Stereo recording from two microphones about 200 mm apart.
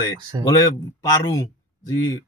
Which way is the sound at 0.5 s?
15° left (ahead or behind).